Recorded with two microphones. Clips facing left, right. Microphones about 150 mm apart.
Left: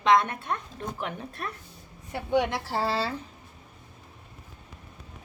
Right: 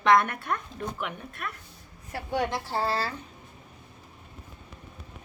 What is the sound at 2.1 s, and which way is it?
A woman's voice, 20° left (ahead or behind).